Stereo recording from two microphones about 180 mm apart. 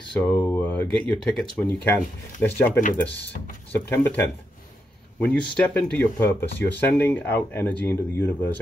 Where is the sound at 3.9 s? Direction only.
10° left (ahead or behind).